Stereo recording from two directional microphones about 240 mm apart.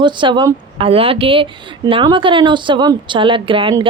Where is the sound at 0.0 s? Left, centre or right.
Centre.